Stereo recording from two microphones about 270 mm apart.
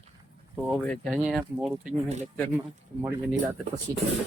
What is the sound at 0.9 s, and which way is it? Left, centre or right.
Speech, centre.